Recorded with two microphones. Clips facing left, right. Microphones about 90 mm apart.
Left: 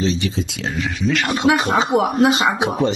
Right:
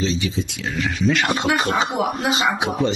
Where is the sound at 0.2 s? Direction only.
85° left.